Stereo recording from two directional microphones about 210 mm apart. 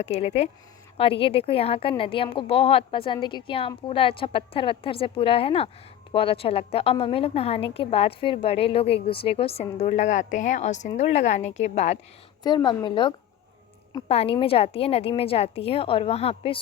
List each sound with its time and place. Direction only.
0.0 s speech: 30° left (ahead or behind)
12.4 s speech: 20° left (ahead or behind)